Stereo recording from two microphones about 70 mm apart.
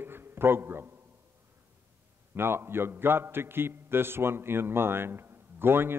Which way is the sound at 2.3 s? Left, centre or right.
Right.